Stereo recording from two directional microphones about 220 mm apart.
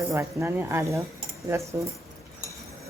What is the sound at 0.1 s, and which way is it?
Speech, 15° right (ahead or behind).